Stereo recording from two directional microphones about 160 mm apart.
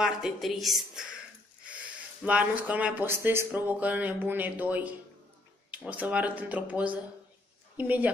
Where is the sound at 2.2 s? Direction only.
10° right (ahead or behind).